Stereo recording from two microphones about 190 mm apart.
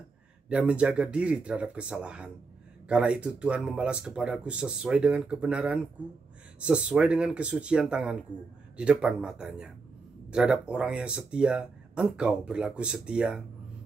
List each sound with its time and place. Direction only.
0.5 s speech: 5° right (ahead or behind)